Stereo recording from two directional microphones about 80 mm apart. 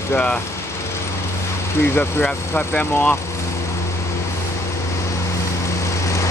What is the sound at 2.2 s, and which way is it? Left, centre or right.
Speech, centre.